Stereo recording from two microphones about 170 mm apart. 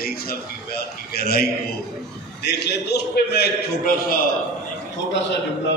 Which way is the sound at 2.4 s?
80° left.